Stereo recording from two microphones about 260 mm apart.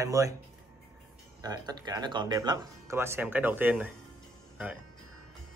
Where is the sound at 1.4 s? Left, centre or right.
Centre.